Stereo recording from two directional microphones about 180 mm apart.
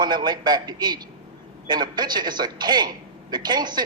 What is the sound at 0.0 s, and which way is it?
A man's voice, 25° right (ahead or behind).